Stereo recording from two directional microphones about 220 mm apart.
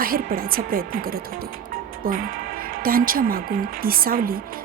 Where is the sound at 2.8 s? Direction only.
40° right (ahead or behind).